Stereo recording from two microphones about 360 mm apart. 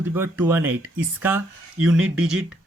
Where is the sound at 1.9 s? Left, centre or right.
Right.